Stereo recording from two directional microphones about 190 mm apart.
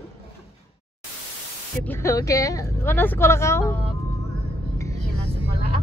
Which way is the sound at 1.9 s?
15° left (ahead or behind).